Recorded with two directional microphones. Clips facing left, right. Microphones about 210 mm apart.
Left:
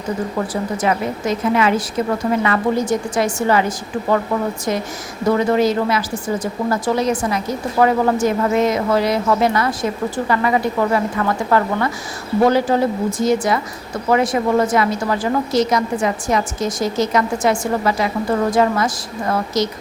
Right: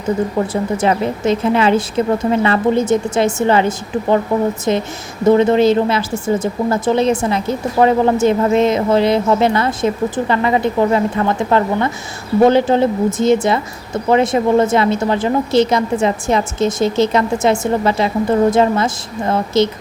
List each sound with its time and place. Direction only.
0.5 s a woman's voice: 25° right (ahead or behind)